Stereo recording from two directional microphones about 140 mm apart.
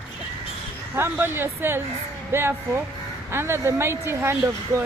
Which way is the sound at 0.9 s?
15° right (ahead or behind).